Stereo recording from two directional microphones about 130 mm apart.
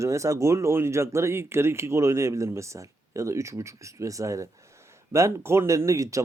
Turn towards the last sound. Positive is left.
turn(degrees=-25)  # may be behind; listen again after turning